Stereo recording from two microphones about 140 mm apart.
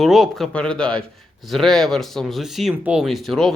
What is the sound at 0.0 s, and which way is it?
Speech, centre (ahead or behind).